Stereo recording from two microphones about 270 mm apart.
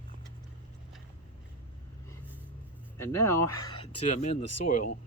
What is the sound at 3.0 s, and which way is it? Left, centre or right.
Speech, centre.